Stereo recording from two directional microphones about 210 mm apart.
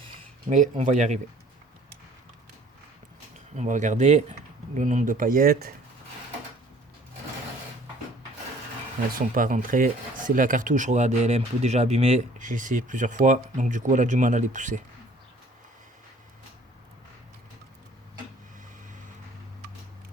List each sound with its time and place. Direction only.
0.5 s speech: 35° right (ahead or behind)
3.3 s speech: 35° right (ahead or behind)
9.1 s speech: 40° right (ahead or behind)